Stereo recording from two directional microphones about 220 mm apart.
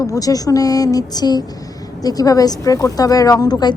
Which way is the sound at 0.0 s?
15° left (ahead or behind).